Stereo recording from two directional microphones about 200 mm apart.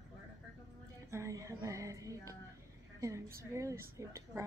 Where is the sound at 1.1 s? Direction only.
15° right (ahead or behind).